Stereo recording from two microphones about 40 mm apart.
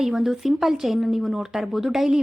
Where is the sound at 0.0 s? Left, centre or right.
Centre.